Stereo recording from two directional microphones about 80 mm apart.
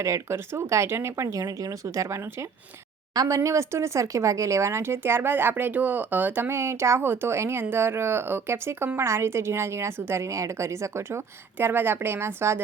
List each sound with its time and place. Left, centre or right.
0.0 s speech: right